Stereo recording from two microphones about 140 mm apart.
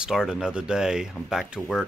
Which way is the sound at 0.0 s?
5° right (ahead or behind).